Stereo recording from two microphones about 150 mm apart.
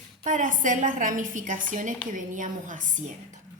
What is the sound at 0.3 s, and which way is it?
A woman's voice, 60° right (ahead or behind).